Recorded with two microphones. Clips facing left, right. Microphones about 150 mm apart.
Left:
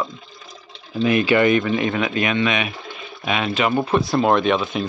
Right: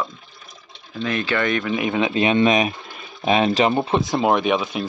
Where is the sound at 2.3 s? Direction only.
40° right (ahead or behind).